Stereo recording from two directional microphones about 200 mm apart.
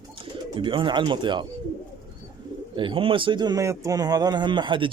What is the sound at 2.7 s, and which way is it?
A man's voice, 25° right (ahead or behind).